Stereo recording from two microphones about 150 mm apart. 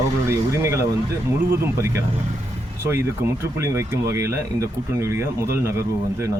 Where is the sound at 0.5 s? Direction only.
20° right (ahead or behind).